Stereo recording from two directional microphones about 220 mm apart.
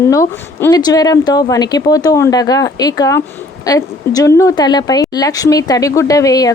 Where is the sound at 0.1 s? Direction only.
15° left (ahead or behind).